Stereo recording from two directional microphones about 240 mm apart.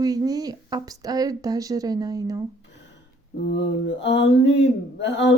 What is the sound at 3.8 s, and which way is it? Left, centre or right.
Mantra, left.